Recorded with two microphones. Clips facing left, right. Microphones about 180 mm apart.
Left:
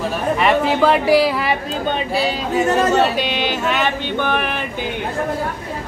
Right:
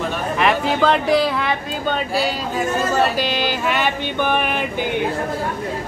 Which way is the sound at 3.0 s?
Centre (ahead or behind).